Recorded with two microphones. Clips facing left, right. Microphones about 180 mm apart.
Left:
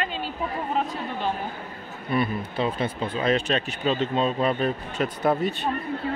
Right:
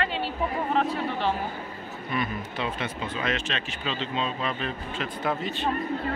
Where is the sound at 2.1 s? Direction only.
35° left (ahead or behind).